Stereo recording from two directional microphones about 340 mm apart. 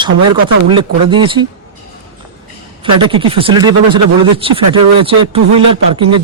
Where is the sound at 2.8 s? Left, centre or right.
Centre.